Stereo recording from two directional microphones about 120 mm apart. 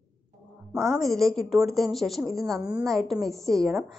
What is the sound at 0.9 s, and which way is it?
A woman's voice, centre (ahead or behind).